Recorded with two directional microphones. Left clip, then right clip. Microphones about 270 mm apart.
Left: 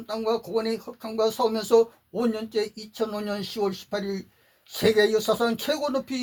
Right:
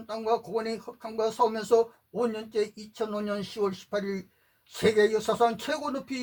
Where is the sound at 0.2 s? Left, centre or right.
Left.